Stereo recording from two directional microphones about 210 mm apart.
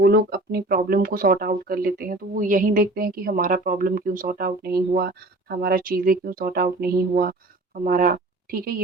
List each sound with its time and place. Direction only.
0.0 s speech: 50° right (ahead or behind)